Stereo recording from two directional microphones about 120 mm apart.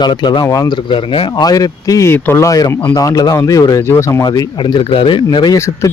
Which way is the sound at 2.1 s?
20° left (ahead or behind).